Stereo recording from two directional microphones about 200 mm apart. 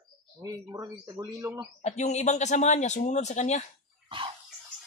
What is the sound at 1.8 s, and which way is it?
Speech, 35° left (ahead or behind).